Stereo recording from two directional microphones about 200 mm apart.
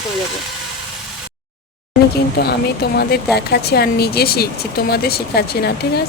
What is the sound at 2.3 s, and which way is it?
Speech, 55° left (ahead or behind).